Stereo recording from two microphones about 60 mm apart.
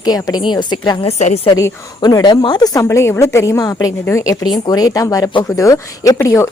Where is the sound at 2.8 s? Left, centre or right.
Left.